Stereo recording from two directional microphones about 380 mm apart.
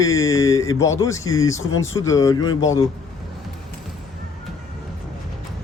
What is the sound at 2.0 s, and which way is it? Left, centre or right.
Speech, centre.